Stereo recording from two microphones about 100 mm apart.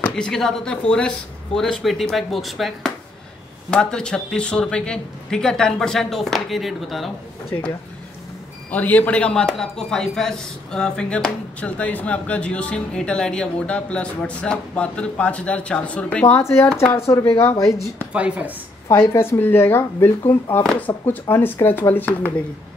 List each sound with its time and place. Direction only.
0.1 s speech: 5° left (ahead or behind)
8.6 s speech: 15° left (ahead or behind)
16.3 s speech: 25° left (ahead or behind)
18.1 s speech: 10° right (ahead or behind)
18.9 s speech: 25° left (ahead or behind)